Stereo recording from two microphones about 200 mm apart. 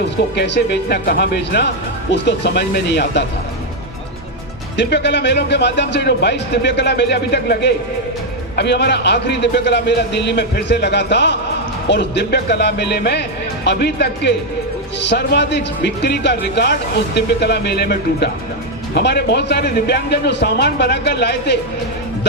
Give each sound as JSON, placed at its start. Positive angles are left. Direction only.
{"t": 0.3, "sound": "speech", "side_deg": 60}
{"t": 4.8, "sound": "speech", "side_deg": 60}